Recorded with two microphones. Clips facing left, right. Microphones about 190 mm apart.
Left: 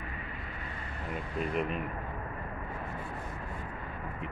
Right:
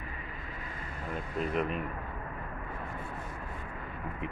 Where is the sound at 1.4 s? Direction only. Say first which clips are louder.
Right 1 dB; centre (ahead or behind).